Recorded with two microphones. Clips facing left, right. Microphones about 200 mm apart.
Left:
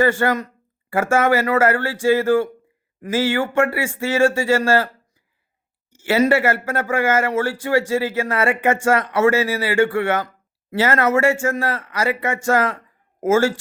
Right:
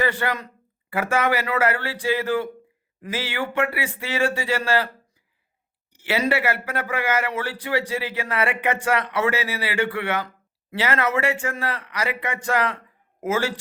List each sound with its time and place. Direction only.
0.0 s speech: 45° left (ahead or behind)
5.9 s speech: 45° left (ahead or behind)